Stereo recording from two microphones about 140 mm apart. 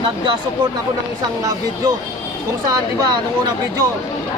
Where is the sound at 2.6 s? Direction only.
30° right (ahead or behind).